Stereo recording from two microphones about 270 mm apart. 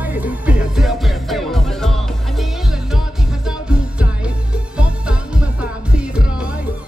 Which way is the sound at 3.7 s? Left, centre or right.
Centre.